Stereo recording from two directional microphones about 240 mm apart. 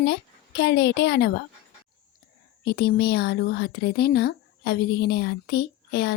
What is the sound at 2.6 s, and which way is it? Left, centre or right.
Speech, left.